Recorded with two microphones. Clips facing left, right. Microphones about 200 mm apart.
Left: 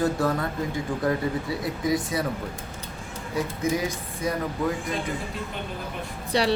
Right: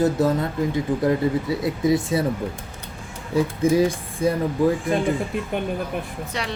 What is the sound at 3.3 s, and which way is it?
Speech, 30° right (ahead or behind).